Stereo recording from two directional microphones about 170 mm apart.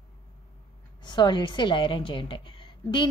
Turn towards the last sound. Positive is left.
turn(degrees=30)  # may be behind; listen again after turning